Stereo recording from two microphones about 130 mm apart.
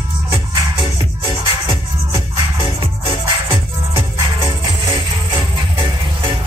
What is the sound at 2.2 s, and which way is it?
Music, 45° right (ahead or behind).